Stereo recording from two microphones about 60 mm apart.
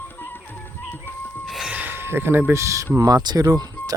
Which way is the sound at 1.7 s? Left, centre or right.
Right.